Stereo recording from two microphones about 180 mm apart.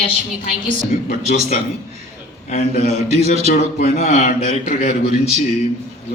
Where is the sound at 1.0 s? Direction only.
45° left (ahead or behind).